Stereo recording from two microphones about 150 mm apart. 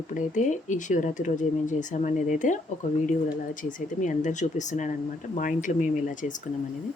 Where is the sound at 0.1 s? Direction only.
55° left (ahead or behind).